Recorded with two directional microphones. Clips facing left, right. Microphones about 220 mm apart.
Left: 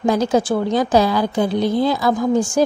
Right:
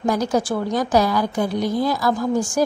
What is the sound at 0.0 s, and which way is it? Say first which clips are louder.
A woman's voice: left 3 dB; 25° left (ahead or behind).